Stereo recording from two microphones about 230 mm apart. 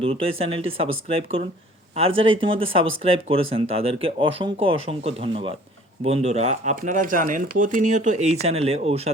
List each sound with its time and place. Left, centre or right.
0.0 s speech: right